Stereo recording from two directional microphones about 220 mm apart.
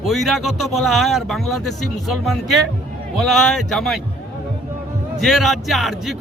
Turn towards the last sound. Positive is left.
turn(degrees=0)  # may be behind; listen again after turning